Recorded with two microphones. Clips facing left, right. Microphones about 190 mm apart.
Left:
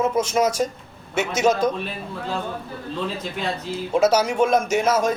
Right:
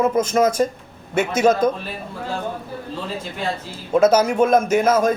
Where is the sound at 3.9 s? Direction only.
50° right (ahead or behind).